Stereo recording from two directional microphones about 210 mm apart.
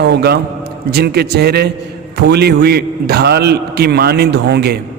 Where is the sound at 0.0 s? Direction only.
50° right (ahead or behind).